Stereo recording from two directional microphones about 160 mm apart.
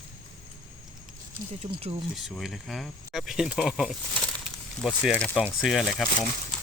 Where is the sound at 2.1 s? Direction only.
Centre (ahead or behind).